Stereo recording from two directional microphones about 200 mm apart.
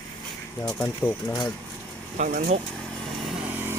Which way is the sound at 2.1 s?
40° right (ahead or behind).